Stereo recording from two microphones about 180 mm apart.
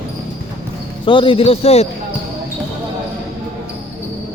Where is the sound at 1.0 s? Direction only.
25° left (ahead or behind).